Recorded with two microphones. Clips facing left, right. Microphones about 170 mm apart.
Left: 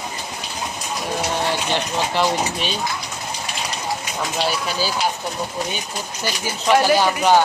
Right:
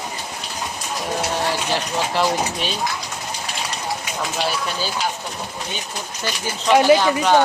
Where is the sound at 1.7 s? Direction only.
Centre (ahead or behind).